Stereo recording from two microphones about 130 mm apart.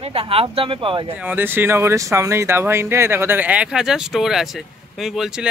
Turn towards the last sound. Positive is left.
turn(degrees=-5)  # may be behind; listen again after turning